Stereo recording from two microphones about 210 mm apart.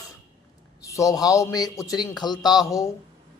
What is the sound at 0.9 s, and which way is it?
A man's voice, 15° left (ahead or behind).